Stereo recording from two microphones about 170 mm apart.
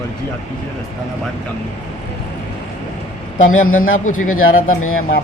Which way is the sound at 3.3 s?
50° left (ahead or behind).